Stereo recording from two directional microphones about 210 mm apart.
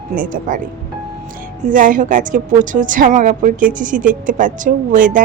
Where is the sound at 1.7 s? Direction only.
40° right (ahead or behind).